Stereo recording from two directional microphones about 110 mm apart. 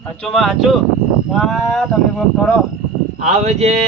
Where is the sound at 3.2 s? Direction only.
90° right.